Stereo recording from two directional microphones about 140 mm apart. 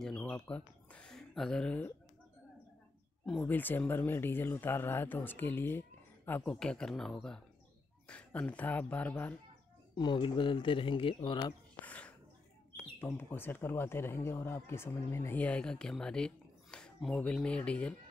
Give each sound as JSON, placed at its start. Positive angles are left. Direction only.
{"t": 0.0, "sound": "speech", "side_deg": 5}
{"t": 3.3, "sound": "speech", "side_deg": 10}
{"t": 9.9, "sound": "speech", "side_deg": 35}
{"t": 11.8, "sound": "a sound", "side_deg": 10}
{"t": 13.0, "sound": "speech", "side_deg": 15}